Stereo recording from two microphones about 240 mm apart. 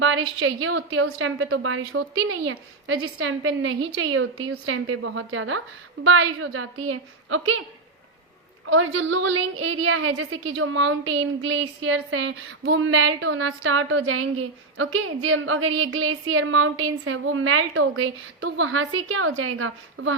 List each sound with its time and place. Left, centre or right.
0.0 s a woman's voice: right
8.7 s a woman's voice: right